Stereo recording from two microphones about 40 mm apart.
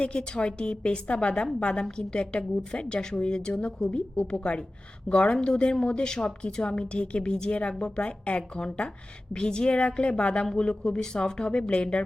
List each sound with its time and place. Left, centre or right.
0.0 s a woman's voice: left